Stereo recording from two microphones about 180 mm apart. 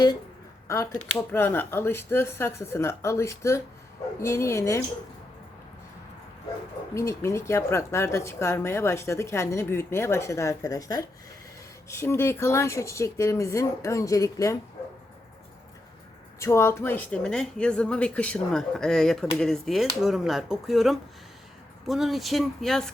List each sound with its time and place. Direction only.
1.3 s a woman's voice: 10° left (ahead or behind)
6.9 s a woman's voice: 15° left (ahead or behind)
16.4 s speech: 15° left (ahead or behind)